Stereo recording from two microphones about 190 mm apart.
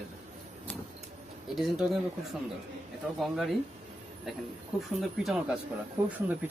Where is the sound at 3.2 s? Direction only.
Centre (ahead or behind).